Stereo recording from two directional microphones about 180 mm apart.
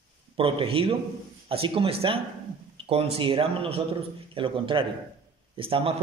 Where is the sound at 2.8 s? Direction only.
30° right (ahead or behind).